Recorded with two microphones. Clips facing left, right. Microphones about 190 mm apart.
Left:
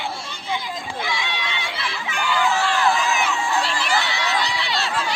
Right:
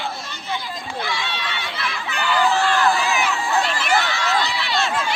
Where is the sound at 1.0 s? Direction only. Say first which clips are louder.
Even; 15° left (ahead or behind).